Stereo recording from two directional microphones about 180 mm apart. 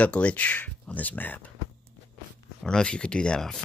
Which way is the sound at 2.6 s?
5° left (ahead or behind).